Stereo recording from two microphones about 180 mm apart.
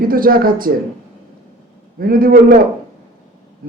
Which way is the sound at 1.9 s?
55° right (ahead or behind).